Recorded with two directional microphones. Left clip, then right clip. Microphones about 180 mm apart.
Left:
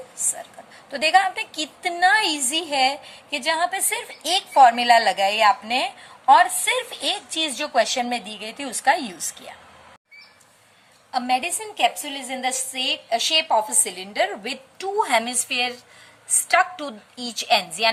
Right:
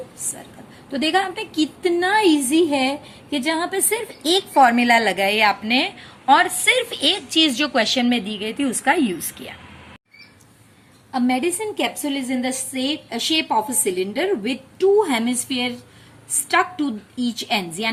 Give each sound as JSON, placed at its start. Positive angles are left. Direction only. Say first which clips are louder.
{"t": 0.9, "sound": "a woman's voice", "louder": "left 2 dB", "side_deg": 20}
{"t": 11.1, "sound": "a woman's voice", "louder": "right 1 dB", "side_deg": 20}